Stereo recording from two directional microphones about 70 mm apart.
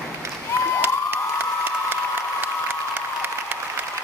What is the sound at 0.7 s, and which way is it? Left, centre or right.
Cheering, right.